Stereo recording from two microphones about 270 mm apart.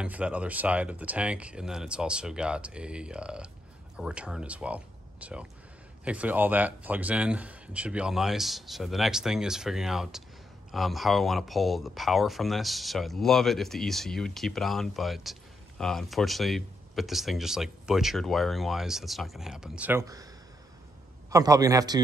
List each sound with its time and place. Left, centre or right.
0.0 s speech: centre
21.3 s a man's voice: centre